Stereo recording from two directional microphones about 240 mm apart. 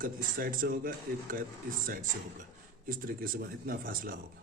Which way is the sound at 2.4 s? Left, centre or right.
Right.